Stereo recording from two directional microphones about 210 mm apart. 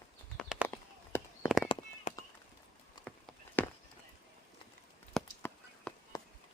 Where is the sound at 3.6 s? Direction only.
10° left (ahead or behind).